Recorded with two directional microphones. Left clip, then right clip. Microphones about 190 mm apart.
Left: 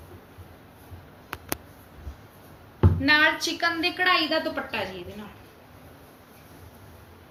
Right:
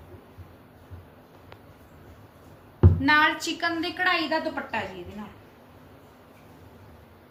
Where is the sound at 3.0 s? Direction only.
50° right (ahead or behind).